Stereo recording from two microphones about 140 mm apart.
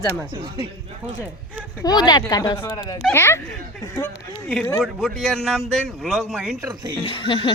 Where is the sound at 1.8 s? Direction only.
30° left (ahead or behind).